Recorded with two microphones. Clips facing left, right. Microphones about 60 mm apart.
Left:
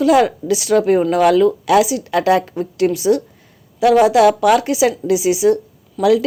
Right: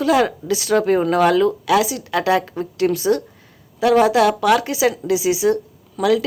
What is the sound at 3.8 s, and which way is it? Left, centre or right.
A woman's voice, centre.